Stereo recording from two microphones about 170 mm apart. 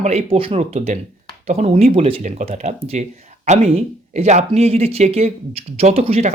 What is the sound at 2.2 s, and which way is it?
Speech, 45° right (ahead or behind).